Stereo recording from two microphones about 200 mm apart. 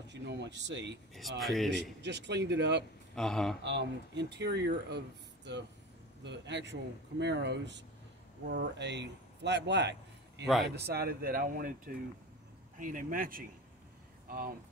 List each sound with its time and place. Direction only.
0.1 s speech: 60° right (ahead or behind)
1.4 s speech: centre (ahead or behind)
1.7 s speech: 60° right (ahead or behind)
3.2 s speech: centre (ahead or behind)
3.6 s a man's voice: 60° right (ahead or behind)
10.4 s speech: centre (ahead or behind)
10.7 s speech: 50° right (ahead or behind)